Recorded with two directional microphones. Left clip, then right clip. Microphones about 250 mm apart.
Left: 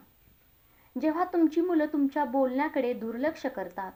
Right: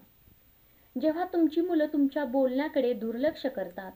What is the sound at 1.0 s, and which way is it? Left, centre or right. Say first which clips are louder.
Speech: even; left.